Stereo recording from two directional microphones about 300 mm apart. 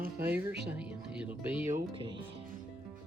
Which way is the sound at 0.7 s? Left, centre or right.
Centre.